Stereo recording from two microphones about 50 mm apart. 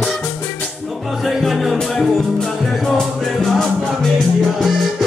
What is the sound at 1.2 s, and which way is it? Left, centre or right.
Music, centre.